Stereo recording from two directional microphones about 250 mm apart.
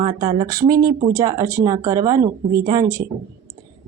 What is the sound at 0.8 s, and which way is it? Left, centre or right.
Speech, right.